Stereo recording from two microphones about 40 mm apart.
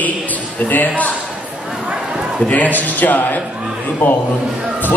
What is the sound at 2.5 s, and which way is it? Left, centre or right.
Speech, left.